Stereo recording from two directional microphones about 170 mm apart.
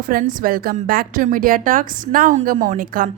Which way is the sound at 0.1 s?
55° right (ahead or behind).